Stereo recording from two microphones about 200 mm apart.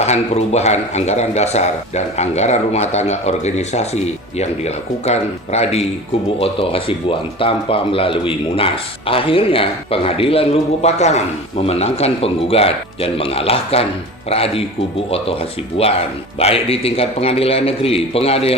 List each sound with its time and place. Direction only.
0.0 s speech: 35° left (ahead or behind)